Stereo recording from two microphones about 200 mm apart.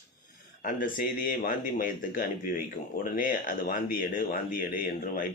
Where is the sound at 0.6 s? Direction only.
45° left (ahead or behind).